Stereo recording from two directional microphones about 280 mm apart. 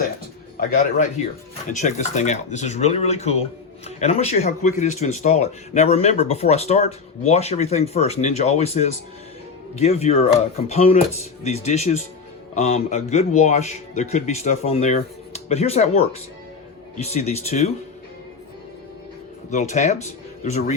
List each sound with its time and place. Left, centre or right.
0.5 s speech: left
19.5 s speech: left